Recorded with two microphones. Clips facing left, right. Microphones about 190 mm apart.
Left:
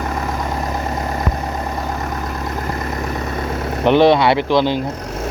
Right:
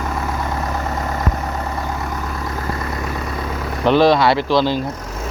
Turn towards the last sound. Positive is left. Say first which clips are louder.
# left 1 dB
turn(degrees=20)  # may be behind; listen again after turning